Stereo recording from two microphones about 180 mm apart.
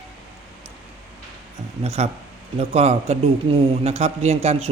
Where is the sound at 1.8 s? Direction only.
35° right (ahead or behind).